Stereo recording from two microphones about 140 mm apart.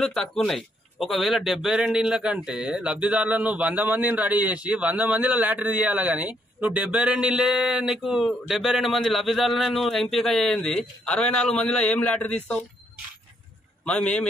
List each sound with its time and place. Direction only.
0.0 s a man's voice: 5° left (ahead or behind)
13.8 s a man's voice: 10° left (ahead or behind)